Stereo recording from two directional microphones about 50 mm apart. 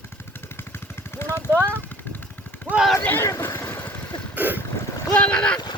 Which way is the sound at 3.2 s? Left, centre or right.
Left.